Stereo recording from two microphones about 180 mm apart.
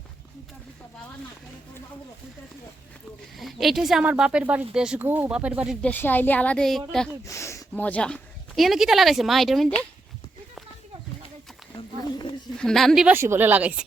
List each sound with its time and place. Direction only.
3.3 s speech: centre (ahead or behind)
5.8 s a woman's voice: 10° left (ahead or behind)
7.3 s speech: 15° left (ahead or behind); by 9.7 s centre (ahead or behind)
12.5 s speech: 5° left (ahead or behind)
13.1 s speech: 15° right (ahead or behind)